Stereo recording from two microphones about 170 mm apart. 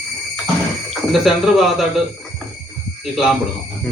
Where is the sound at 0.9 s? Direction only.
Centre (ahead or behind).